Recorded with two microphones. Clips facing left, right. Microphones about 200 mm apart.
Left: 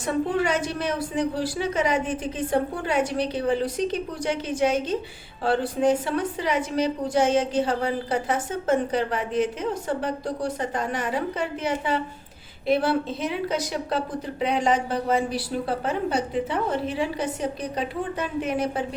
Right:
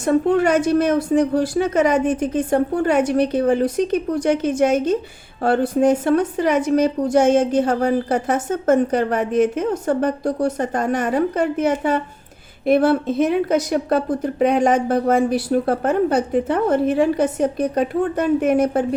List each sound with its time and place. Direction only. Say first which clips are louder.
0.0 s a woman's voice: right 8 dB; 45° right (ahead or behind)